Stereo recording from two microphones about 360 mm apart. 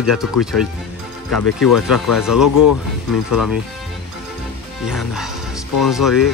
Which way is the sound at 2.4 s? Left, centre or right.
Left.